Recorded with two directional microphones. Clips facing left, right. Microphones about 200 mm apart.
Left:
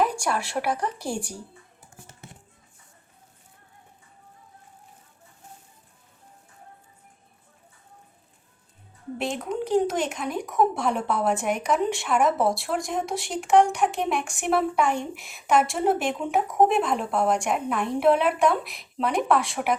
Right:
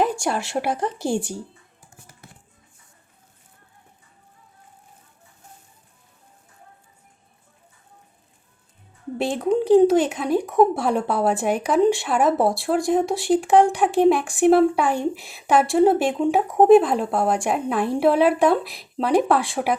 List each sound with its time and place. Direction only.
0.0 s speech: 25° right (ahead or behind)
9.1 s speech: 30° right (ahead or behind)